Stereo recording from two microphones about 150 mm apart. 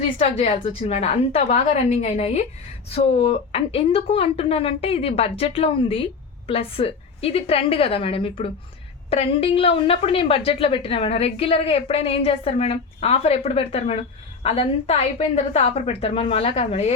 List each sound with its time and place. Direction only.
0.2 s a woman's voice: 45° left (ahead or behind)